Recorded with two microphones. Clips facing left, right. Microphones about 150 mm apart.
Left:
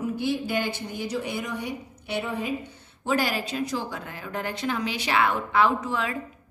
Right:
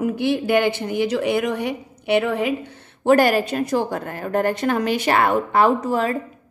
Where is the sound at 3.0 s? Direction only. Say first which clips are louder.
Right 10 dB; 55° right (ahead or behind).